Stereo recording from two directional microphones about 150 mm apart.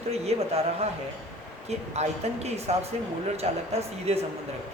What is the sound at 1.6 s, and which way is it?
Speech, 45° right (ahead or behind).